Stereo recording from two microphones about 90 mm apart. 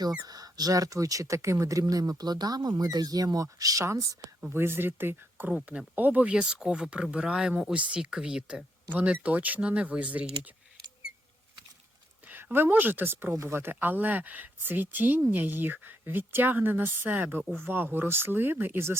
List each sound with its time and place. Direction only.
0.0 s speech: 45° right (ahead or behind)
4.4 s a woman's voice: 25° right (ahead or behind)
12.3 s a woman's voice: 20° right (ahead or behind)